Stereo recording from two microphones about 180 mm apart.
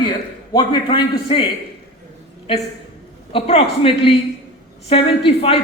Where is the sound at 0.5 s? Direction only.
25° left (ahead or behind).